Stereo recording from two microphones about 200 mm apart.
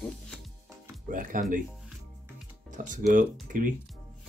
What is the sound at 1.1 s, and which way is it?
Speech, 40° right (ahead or behind).